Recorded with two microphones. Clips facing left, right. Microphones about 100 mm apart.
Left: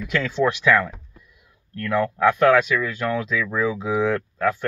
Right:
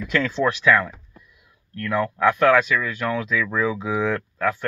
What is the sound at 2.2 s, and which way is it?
Speech, 25° left (ahead or behind).